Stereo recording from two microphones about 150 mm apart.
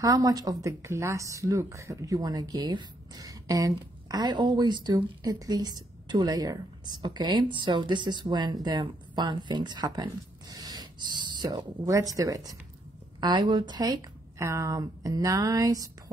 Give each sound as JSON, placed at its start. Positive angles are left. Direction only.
{"t": 0.0, "sound": "a woman's voice", "side_deg": -25}